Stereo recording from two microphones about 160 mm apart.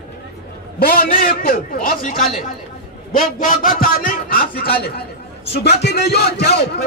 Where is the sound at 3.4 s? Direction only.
55° left (ahead or behind).